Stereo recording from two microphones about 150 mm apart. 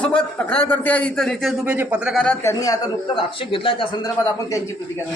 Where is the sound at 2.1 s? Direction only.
5° left (ahead or behind).